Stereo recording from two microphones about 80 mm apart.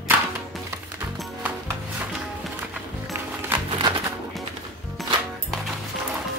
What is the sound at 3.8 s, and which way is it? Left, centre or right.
Music, right.